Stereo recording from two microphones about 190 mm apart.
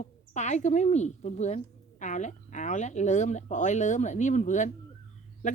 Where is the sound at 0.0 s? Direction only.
40° left (ahead or behind).